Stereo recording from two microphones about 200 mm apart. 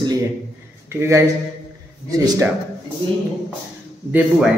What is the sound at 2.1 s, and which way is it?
Speech, 15° right (ahead or behind).